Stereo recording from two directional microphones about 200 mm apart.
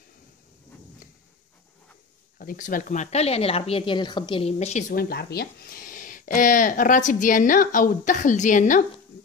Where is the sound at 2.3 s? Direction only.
45° left (ahead or behind).